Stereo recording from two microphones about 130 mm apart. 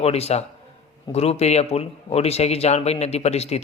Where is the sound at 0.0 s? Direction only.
50° left (ahead or behind).